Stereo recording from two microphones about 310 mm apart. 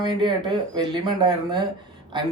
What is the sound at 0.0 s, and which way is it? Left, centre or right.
Speech, centre.